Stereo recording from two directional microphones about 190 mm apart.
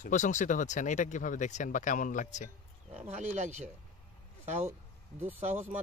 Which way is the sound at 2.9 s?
35° right (ahead or behind).